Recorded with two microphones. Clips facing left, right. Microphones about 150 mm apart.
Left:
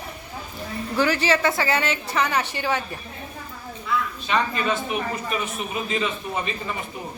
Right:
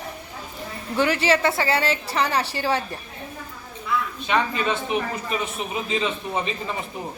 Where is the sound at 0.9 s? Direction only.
30° right (ahead or behind).